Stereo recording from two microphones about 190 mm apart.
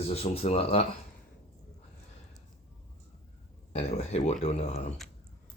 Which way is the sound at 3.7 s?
35° left (ahead or behind).